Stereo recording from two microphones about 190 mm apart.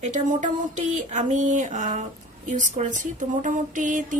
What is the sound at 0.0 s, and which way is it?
Speech, 40° right (ahead or behind).